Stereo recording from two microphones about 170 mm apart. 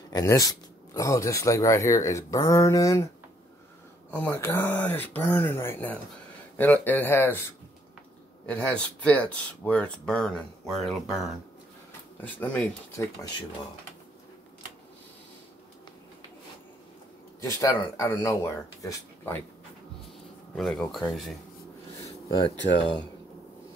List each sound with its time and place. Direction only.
0.1 s speech: 20° left (ahead or behind)
4.1 s speech: 10° left (ahead or behind)
8.5 s speech: 5° left (ahead or behind)
17.4 s speech: 20° left (ahead or behind)
20.5 s speech: centre (ahead or behind)